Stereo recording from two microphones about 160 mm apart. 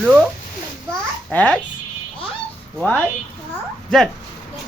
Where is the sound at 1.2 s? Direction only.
10° left (ahead or behind).